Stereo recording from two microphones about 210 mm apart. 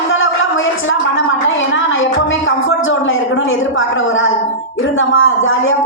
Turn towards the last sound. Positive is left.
turn(degrees=70)  # may be behind; listen again after turning